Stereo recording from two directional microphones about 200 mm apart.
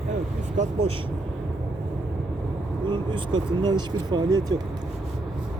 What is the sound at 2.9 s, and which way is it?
Speech, 25° right (ahead or behind).